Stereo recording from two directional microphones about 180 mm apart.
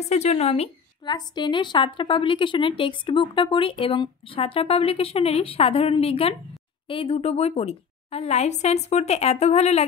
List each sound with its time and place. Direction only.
0.1 s a woman's voice: 35° left (ahead or behind)